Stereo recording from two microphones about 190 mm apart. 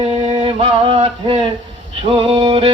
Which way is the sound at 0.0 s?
30° right (ahead or behind).